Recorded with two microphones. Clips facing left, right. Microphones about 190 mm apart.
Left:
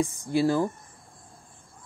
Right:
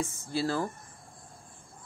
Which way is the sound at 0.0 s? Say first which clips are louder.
Left 7 dB; 15° left (ahead or behind).